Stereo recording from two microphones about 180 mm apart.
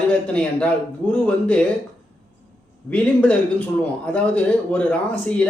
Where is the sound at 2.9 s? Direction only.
5° left (ahead or behind).